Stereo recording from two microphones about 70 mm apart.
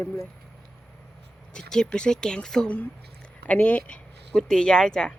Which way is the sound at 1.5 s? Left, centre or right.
Centre.